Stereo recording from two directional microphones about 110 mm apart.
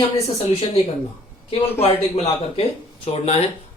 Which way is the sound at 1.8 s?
65° left (ahead or behind).